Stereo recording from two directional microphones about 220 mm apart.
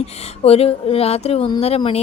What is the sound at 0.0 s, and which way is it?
Speech, 30° left (ahead or behind).